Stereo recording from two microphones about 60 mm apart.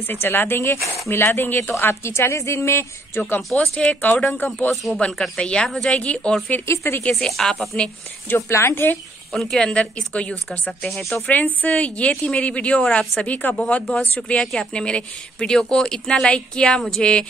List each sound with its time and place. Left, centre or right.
0.1 s speech: left
3.2 s a woman's voice: left
4.9 s a woman's voice: centre
5.4 s speech: centre
6.7 s speech: left
7.1 s a woman's voice: centre
8.4 s speech: left
9.3 s a woman's voice: centre
9.6 s a woman's voice: centre
10.9 s a woman's voice: centre
11.2 s a woman's voice: left